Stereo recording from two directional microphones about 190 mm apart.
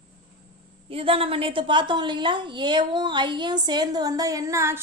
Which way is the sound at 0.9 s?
30° right (ahead or behind).